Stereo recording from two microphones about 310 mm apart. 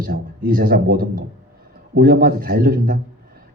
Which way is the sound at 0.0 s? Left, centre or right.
Right.